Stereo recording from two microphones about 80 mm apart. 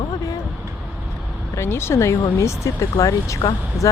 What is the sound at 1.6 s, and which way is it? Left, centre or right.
Speech, left.